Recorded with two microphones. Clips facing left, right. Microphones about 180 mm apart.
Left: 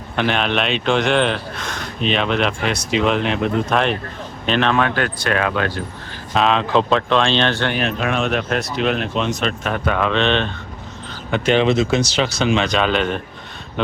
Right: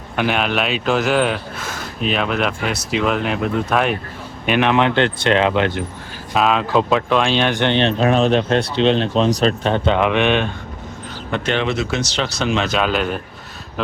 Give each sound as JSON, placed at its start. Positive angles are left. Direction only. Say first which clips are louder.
{"t": 0.2, "sound": "speech", "louder": "even", "side_deg": -5}
{"t": 6.3, "sound": "speech", "louder": "even", "side_deg": -5}
{"t": 11.3, "sound": "speech", "louder": "left 3 dB", "side_deg": 0}
{"t": 11.5, "sound": "speech", "louder": "left 6 dB", "side_deg": 20}
{"t": 12.0, "sound": "speech", "louder": "left 2 dB", "side_deg": 5}